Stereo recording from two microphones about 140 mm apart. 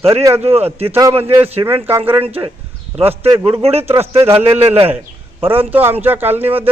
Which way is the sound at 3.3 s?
20° right (ahead or behind).